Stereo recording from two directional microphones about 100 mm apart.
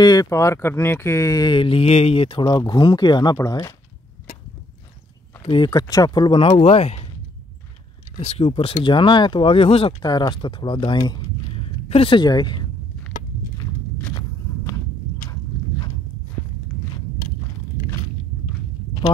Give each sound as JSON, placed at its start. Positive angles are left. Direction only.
{"t": 0.0, "sound": "speech", "side_deg": 40}
{"t": 1.5, "sound": "speech", "side_deg": 65}
{"t": 2.4, "sound": "speech", "side_deg": 40}
{"t": 3.3, "sound": "speech", "side_deg": 35}
{"t": 5.6, "sound": "speech", "side_deg": 45}
{"t": 6.6, "sound": "speech", "side_deg": 90}
{"t": 8.2, "sound": "speech", "side_deg": 90}
{"t": 10.0, "sound": "speech", "side_deg": 45}
{"t": 11.5, "sound": "a sound", "side_deg": 70}
{"t": 12.2, "sound": "speech", "side_deg": 45}